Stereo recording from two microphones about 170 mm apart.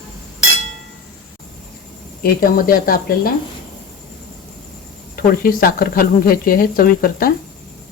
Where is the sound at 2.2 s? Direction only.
60° left (ahead or behind).